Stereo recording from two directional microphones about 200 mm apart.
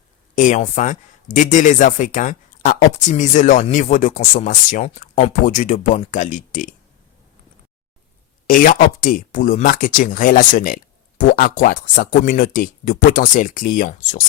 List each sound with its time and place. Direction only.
0.3 s speech: 40° left (ahead or behind)
8.4 s speech: 45° left (ahead or behind)